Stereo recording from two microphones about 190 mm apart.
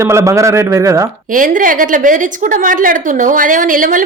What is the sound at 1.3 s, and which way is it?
A woman's voice, 45° right (ahead or behind).